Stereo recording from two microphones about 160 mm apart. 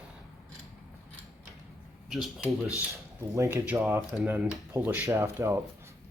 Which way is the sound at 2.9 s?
20° right (ahead or behind).